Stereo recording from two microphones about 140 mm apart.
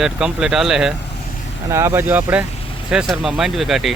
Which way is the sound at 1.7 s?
20° right (ahead or behind).